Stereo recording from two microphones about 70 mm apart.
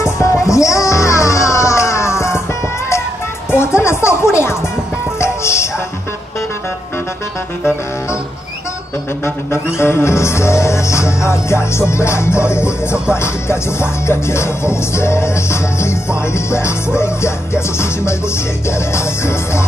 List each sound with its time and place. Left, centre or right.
0.0 s music: left
3.5 s music: left
9.8 s music: left